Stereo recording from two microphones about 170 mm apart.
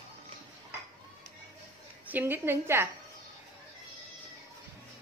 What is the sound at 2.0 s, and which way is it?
Speech, 10° right (ahead or behind).